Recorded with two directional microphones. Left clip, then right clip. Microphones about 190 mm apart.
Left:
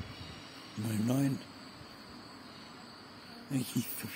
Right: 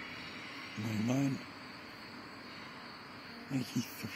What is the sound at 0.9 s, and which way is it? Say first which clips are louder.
Speech: left 2 dB; 20° left (ahead or behind).